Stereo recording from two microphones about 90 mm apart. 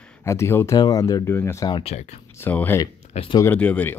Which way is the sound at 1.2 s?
30° left (ahead or behind).